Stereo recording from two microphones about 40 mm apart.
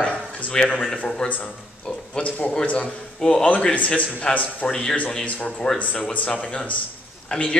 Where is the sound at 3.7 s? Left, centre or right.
Left.